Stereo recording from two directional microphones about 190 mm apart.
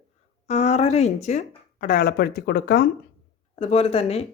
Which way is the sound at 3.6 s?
30° left (ahead or behind).